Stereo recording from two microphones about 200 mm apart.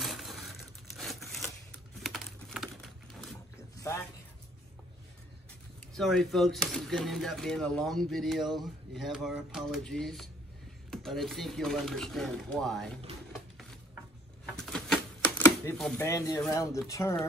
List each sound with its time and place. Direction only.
0.0 s crushing: centre (ahead or behind)
0.9 s a sound: centre (ahead or behind)
2.0 s typing: centre (ahead or behind)
3.9 s speech: 15° left (ahead or behind)
5.9 s speech: centre (ahead or behind)
14.6 s typewriter: 5° left (ahead or behind)
16.0 s speech: 15° left (ahead or behind)